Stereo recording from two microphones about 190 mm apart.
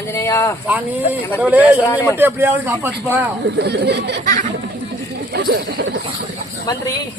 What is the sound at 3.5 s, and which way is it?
Speech, 60° right (ahead or behind).